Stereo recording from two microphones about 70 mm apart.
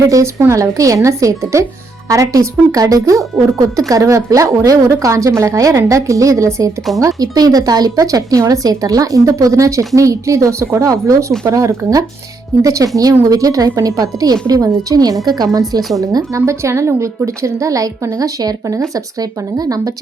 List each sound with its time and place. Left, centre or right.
0.1 s a woman's voice: right
7.2 s a woman's voice: right
16.0 s a woman's voice: right